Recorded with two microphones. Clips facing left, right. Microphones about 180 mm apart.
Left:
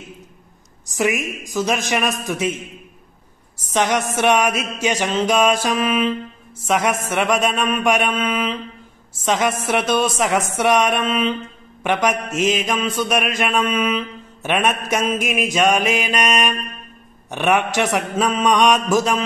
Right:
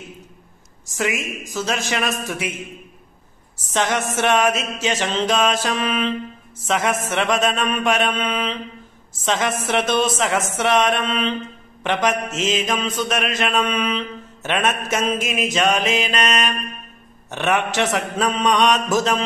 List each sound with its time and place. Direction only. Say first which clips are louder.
0.8 s mantra: left 3 dB; 15° left (ahead or behind)
3.7 s mantra: left 2 dB; 15° left (ahead or behind)